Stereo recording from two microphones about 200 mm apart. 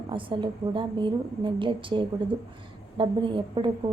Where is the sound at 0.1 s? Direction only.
25° right (ahead or behind).